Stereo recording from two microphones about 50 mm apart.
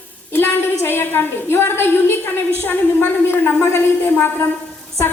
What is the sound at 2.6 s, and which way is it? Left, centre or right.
A man's voice, left.